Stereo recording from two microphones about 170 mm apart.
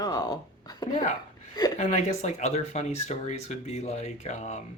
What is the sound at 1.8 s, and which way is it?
Speech, 45° left (ahead or behind).